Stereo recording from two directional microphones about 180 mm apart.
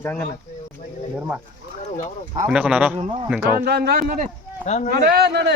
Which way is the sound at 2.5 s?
5° right (ahead or behind).